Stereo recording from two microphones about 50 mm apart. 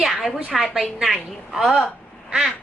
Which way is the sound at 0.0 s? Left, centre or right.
Centre.